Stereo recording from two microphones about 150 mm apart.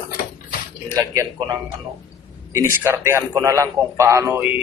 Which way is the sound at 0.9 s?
25° right (ahead or behind).